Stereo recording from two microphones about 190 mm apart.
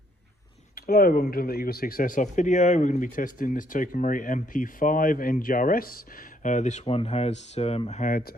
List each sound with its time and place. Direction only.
0.8 s speech: 50° left (ahead or behind)